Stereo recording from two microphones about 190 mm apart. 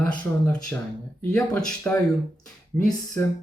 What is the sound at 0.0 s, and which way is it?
Speech, 10° left (ahead or behind).